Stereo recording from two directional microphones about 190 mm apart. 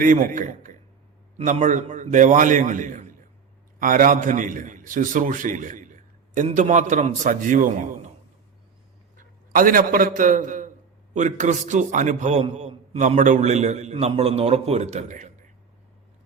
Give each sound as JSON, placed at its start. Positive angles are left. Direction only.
{"t": 0.0, "sound": "a man's voice", "side_deg": -45}
{"t": 9.5, "sound": "a man's voice", "side_deg": -45}